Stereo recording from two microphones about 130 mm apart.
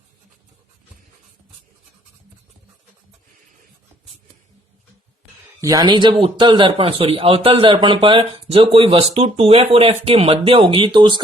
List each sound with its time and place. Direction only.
5.5 s a man's voice: 25° right (ahead or behind)